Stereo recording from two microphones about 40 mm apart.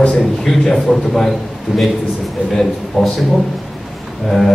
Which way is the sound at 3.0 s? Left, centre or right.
Centre.